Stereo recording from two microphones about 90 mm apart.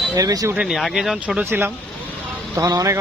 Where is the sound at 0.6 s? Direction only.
5° right (ahead or behind).